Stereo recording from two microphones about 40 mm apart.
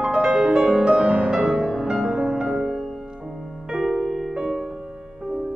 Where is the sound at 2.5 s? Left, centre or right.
Centre.